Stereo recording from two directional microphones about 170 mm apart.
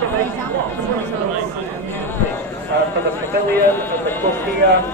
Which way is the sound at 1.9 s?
15° left (ahead or behind).